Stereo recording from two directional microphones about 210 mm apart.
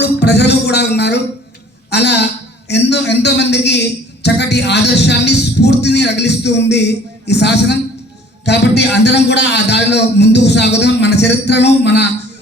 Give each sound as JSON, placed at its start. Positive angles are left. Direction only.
{"t": 0.0, "sound": "music", "side_deg": 55}
{"t": 1.9, "sound": "a man's voice", "side_deg": 55}